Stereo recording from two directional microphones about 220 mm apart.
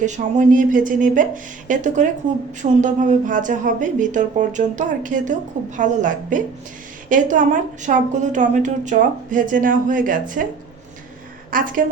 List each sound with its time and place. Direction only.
0.0 s speech: 35° right (ahead or behind)
11.5 s a woman's voice: 40° right (ahead or behind)